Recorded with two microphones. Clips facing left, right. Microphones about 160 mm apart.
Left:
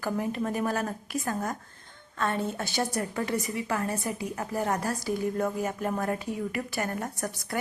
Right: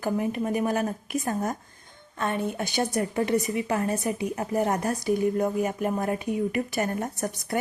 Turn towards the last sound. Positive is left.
turn(degrees=-20)  # may be behind; listen again after turning